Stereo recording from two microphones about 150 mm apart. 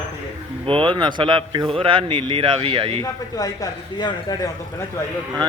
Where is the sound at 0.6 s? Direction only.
35° right (ahead or behind).